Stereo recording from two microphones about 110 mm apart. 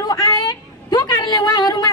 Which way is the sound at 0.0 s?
30° left (ahead or behind).